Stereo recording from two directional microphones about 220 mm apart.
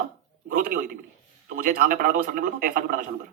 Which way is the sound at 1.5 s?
40° right (ahead or behind).